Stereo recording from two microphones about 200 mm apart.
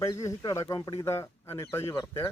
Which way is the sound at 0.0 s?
15° left (ahead or behind).